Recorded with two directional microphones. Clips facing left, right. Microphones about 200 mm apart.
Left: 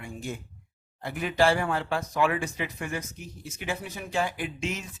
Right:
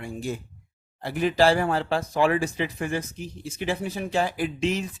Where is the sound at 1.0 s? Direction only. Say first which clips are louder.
Right 4 dB; 35° right (ahead or behind).